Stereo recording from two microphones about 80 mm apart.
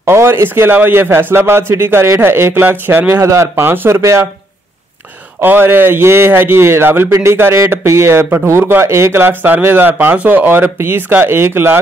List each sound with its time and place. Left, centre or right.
0.0 s a man's voice: right
5.4 s a man's voice: right
9.2 s a man's voice: right